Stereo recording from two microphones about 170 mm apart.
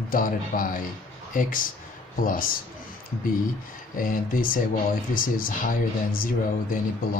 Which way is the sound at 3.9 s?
55° left (ahead or behind).